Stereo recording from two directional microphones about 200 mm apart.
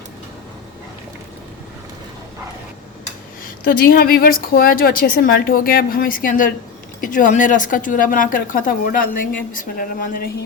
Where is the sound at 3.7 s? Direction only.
45° left (ahead or behind).